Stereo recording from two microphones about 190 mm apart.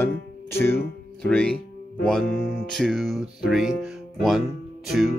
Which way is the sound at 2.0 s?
Centre (ahead or behind).